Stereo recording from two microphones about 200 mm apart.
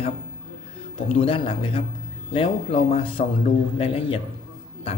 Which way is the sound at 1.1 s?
25° left (ahead or behind).